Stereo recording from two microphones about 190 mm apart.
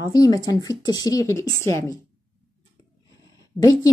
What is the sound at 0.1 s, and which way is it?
A woman's voice, 20° left (ahead or behind).